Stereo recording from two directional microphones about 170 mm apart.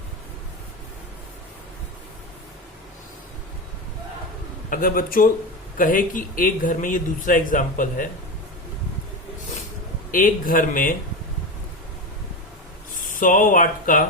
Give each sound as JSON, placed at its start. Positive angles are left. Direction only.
{"t": 4.7, "sound": "a man's voice", "side_deg": 60}
{"t": 10.1, "sound": "a man's voice", "side_deg": 55}
{"t": 13.1, "sound": "speech", "side_deg": 50}